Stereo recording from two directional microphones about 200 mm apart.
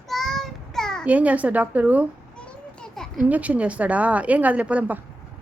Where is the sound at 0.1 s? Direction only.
Centre (ahead or behind).